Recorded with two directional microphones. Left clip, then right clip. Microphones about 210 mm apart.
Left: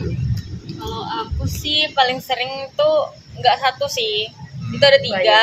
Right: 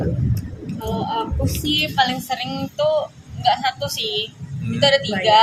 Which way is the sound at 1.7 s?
30° left (ahead or behind).